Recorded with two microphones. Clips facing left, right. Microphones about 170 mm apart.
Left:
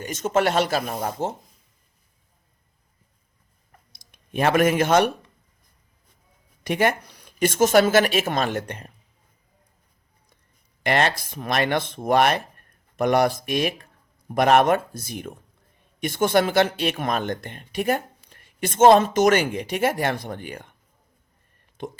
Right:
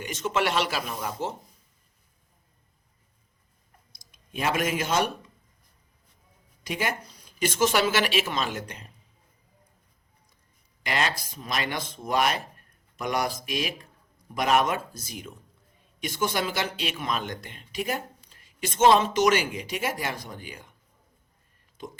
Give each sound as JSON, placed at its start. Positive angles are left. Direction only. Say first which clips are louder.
{"t": 0.0, "sound": "speech", "louder": "left 5 dB", "side_deg": 45}
{"t": 3.7, "sound": "clicking", "louder": "left 4 dB", "side_deg": 60}
{"t": 6.7, "sound": "speech", "louder": "left 8 dB", "side_deg": 60}
{"t": 10.8, "sound": "speech", "louder": "left 7 dB", "side_deg": 55}
{"t": 21.8, "sound": "speech", "louder": "left 6 dB", "side_deg": 55}